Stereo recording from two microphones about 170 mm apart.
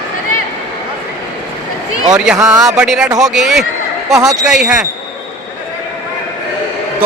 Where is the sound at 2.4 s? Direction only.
5° right (ahead or behind).